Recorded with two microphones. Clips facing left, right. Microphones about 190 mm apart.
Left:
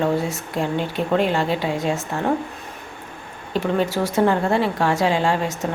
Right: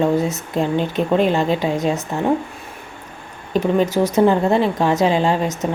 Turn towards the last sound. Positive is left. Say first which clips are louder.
# right 3 dB
turn(degrees=-20)  # may be behind; listen again after turning